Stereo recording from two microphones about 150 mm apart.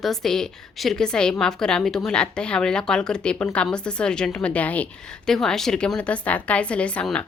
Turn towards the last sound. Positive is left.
turn(degrees=5)  # may be behind; listen again after turning